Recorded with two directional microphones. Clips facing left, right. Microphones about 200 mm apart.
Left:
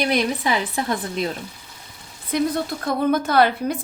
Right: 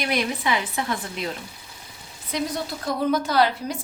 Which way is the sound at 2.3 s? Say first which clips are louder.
Left 6 dB; 55° left (ahead or behind).